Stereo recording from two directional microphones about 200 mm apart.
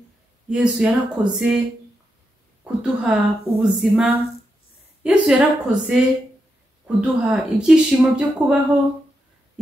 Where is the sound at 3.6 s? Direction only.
Centre (ahead or behind).